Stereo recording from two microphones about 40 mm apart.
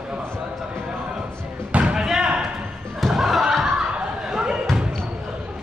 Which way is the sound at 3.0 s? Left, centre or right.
Centre.